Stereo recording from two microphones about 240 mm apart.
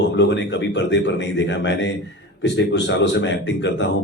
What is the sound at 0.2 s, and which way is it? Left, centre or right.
Speech, left.